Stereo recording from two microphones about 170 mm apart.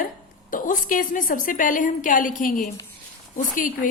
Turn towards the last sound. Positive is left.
turn(degrees=50)  # may be behind; listen again after turning